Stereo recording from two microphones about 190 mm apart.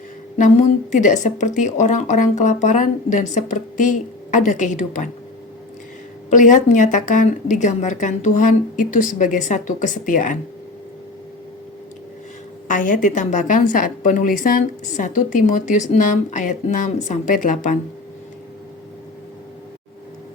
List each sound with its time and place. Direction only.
0.3 s a woman's voice: 40° left (ahead or behind)
6.3 s a woman's voice: 40° left (ahead or behind)
12.6 s a woman's voice: 45° left (ahead or behind)